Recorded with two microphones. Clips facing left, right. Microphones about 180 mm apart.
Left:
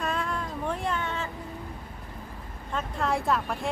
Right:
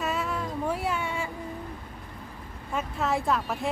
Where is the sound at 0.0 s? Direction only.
5° right (ahead or behind).